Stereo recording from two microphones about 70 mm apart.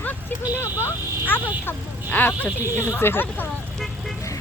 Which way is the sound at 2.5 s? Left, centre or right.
Left.